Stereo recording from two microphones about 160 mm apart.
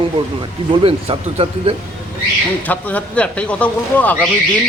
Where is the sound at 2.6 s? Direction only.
10° left (ahead or behind).